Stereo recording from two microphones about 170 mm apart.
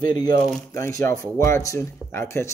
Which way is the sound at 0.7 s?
20° left (ahead or behind).